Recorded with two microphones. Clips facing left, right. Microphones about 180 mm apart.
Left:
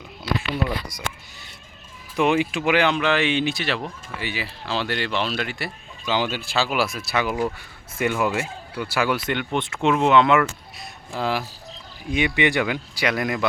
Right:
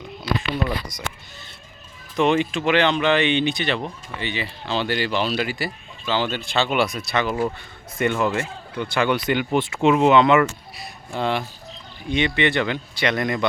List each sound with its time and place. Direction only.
2.1 s speech: 10° left (ahead or behind)
6.1 s speech: 10° left (ahead or behind)